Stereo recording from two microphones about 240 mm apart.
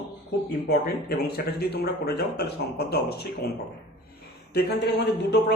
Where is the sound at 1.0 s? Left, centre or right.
Left.